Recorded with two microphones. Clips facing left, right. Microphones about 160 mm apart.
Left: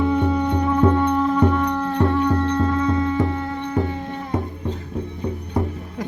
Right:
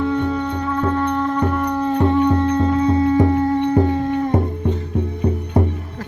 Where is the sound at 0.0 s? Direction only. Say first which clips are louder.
Even; 10° left (ahead or behind).